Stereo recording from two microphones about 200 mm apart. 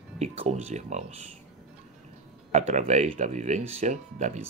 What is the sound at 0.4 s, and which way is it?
Speech, 30° right (ahead or behind).